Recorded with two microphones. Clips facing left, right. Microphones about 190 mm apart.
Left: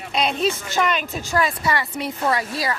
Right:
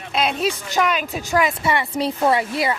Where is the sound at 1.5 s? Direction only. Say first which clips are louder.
Right 2 dB; 25° right (ahead or behind).